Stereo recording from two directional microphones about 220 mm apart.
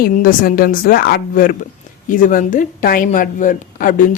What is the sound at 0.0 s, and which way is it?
Speech, 40° left (ahead or behind).